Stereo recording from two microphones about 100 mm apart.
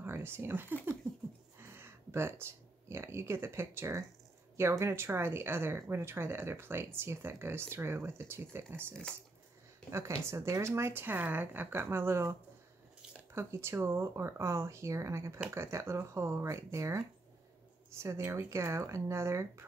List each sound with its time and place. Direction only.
0.0 s speech: 25° right (ahead or behind)